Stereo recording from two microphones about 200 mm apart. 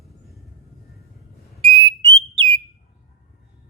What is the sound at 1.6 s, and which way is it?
Whistle, 30° right (ahead or behind).